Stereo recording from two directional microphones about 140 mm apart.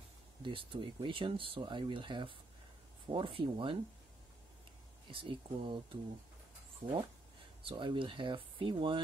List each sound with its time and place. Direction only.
0.4 s speech: 35° right (ahead or behind)
5.1 s speech: 40° right (ahead or behind)
6.8 s speech: 20° right (ahead or behind)
7.6 s speech: 35° right (ahead or behind)